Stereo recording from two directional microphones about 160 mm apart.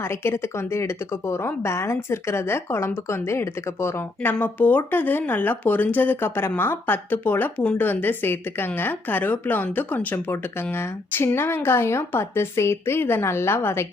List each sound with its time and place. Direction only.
0.0 s a woman's voice: 15° left (ahead or behind)